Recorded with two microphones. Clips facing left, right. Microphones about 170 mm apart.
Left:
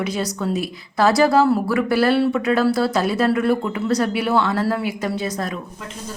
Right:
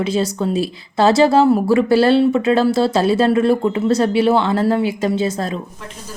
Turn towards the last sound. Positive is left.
turn(degrees=-25)  # may be behind; listen again after turning